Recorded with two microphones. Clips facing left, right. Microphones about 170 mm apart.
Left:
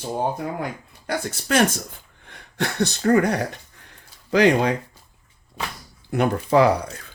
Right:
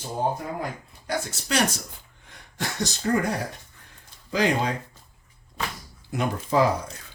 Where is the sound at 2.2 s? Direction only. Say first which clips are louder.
Left 6 dB; 60° left (ahead or behind).